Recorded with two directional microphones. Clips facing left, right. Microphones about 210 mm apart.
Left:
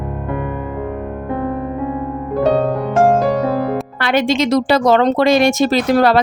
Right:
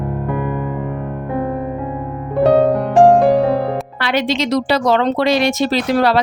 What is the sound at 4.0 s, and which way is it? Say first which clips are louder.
Speech: left 4 dB; 50° left (ahead or behind).